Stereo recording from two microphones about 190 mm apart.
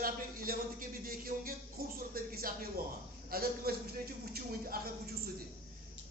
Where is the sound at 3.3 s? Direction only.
55° right (ahead or behind).